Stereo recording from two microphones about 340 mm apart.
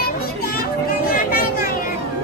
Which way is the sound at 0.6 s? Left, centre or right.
Left.